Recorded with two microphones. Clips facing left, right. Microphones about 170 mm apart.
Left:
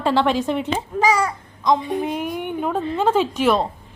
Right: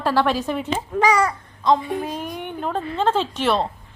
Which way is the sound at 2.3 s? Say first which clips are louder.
Left 3 dB; 5° left (ahead or behind).